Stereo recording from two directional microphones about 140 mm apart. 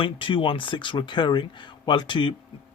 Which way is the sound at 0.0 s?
40° left (ahead or behind).